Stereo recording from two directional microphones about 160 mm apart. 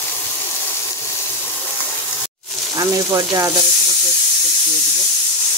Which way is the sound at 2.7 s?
20° right (ahead or behind).